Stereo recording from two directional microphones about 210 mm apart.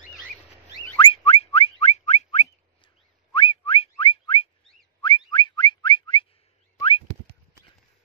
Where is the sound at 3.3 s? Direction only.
25° left (ahead or behind).